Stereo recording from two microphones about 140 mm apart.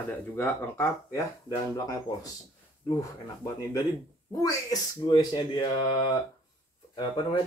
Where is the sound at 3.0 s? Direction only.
25° left (ahead or behind).